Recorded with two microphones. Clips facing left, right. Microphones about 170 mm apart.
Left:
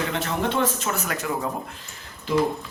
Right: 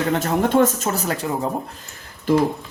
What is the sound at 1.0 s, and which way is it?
Speech, 30° right (ahead or behind).